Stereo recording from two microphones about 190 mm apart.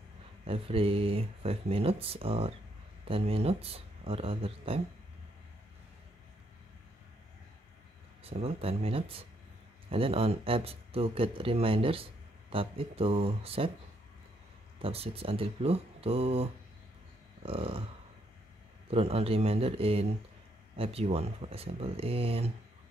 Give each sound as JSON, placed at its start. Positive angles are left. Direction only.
{"t": 0.5, "sound": "speech", "side_deg": -30}
{"t": 8.2, "sound": "speech", "side_deg": -30}
{"t": 14.8, "sound": "speech", "side_deg": -30}
{"t": 18.9, "sound": "speech", "side_deg": -30}